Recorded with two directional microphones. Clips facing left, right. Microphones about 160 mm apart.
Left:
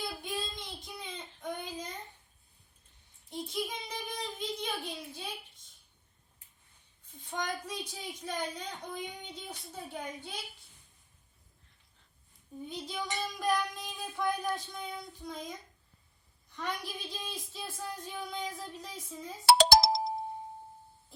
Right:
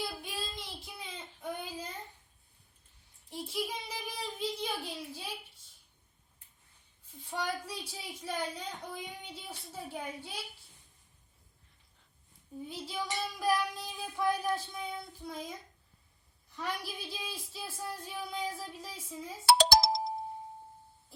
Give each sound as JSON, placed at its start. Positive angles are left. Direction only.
{"t": 0.2, "sound": "child singing", "side_deg": -5}
{"t": 3.2, "sound": "a sound", "side_deg": -5}
{"t": 7.3, "sound": "a woman's voice", "side_deg": -5}
{"t": 12.6, "sound": "a woman's voice", "side_deg": -5}
{"t": 16.6, "sound": "speech", "side_deg": -5}
{"t": 19.5, "sound": "music", "side_deg": 70}